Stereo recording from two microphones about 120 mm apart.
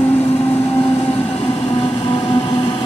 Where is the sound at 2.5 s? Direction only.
45° left (ahead or behind).